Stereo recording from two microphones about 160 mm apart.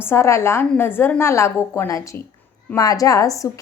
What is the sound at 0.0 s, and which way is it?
A woman's voice, 15° left (ahead or behind).